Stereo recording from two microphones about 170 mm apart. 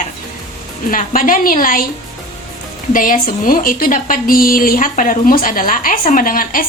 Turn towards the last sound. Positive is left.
turn(degrees=55)  # may be behind; listen again after turning